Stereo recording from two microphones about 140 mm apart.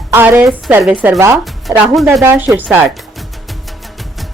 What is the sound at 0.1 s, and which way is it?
Speech, 15° right (ahead or behind).